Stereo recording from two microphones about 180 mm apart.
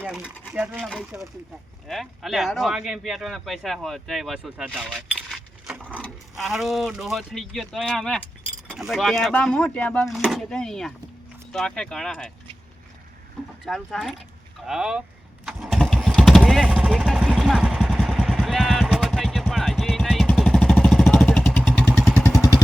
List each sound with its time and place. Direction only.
0.0 s speech: 5° right (ahead or behind)
13.7 s speech: centre (ahead or behind)
15.4 s vehicle: centre (ahead or behind); by 22.6 s 20° left (ahead or behind)